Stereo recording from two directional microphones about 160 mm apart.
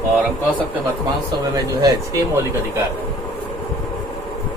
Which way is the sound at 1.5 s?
25° right (ahead or behind).